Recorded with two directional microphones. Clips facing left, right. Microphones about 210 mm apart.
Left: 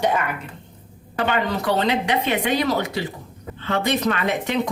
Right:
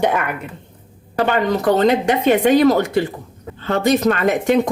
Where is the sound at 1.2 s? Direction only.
45° right (ahead or behind).